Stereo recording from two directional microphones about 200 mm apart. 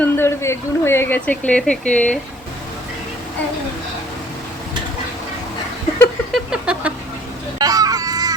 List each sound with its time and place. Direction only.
0.0 s speech: 10° left (ahead or behind)
6.3 s a sound: 5° right (ahead or behind)
7.6 s vehicle: 20° right (ahead or behind)